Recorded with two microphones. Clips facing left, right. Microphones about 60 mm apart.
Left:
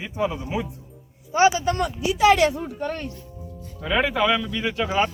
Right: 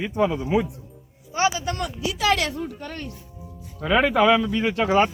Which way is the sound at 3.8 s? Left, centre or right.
Right.